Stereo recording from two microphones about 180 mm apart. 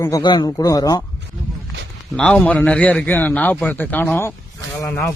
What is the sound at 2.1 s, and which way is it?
A man's voice, 5° left (ahead or behind).